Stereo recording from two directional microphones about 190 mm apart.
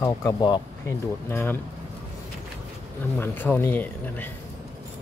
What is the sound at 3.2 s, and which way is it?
Speech, 10° left (ahead or behind).